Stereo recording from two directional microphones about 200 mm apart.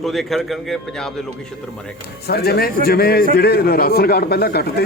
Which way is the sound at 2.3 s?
50° left (ahead or behind).